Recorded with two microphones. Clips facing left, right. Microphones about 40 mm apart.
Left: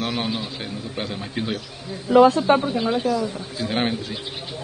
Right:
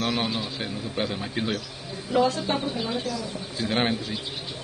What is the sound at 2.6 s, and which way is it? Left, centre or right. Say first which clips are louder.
Speech: left 6 dB; centre.